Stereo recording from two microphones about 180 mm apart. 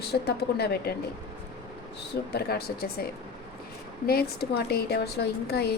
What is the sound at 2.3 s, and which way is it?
Speech, 60° left (ahead or behind).